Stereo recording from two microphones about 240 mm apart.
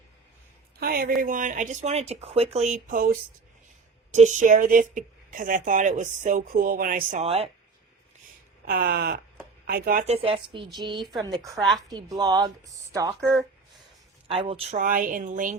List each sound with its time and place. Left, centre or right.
0.8 s a man's voice: right
8.6 s speech: right
10.1 s a woman's voice: right
11.5 s a woman's voice: centre
11.9 s speech: centre
14.3 s speech: right